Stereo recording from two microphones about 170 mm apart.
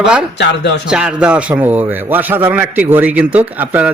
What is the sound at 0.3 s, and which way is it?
Speech, 85° left.